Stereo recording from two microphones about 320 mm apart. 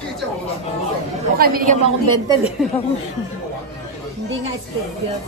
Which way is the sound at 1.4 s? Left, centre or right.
Right.